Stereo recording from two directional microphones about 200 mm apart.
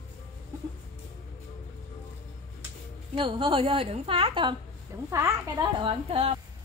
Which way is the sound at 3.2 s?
25° right (ahead or behind).